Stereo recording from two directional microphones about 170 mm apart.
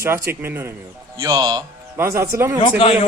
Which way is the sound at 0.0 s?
15° right (ahead or behind).